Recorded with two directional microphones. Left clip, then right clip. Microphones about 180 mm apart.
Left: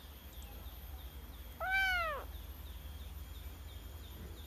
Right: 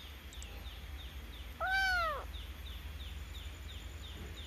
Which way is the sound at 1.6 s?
5° left (ahead or behind).